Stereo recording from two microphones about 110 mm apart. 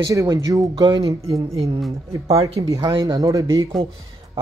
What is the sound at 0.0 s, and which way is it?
Speech, 35° right (ahead or behind).